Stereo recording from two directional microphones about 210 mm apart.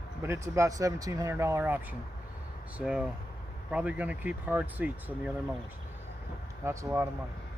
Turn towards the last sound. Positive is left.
turn(degrees=-15)  # may be behind; listen again after turning